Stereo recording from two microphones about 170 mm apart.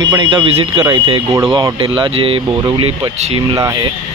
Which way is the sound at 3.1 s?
40° right (ahead or behind).